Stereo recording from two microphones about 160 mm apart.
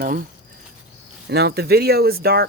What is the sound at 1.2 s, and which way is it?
Speech, 90° right.